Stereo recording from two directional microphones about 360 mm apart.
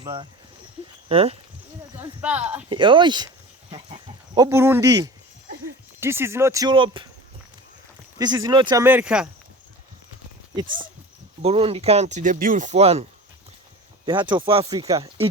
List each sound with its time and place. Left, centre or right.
0.0 s speech: centre
2.0 s speech: centre
8.2 s speech: centre
11.4 s speech: centre